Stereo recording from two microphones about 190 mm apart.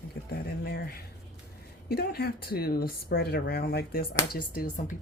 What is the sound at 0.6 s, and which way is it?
Speech, 55° left (ahead or behind).